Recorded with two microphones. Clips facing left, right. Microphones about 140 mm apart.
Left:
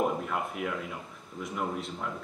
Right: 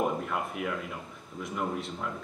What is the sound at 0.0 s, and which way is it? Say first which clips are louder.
A man's voice: even; centre (ahead or behind).